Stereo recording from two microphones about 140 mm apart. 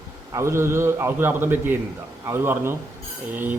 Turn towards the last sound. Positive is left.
turn(degrees=-15)  # may be behind; listen again after turning